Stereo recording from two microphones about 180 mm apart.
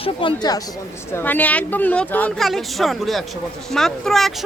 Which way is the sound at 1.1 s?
10° left (ahead or behind).